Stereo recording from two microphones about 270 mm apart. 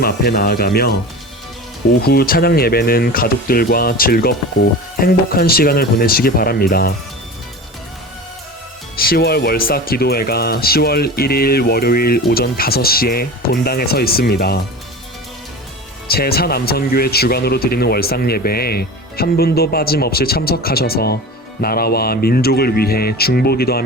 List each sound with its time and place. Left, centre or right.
0.0 s speech: left
2.0 s speech: left
9.0 s speech: left
16.0 s speech: left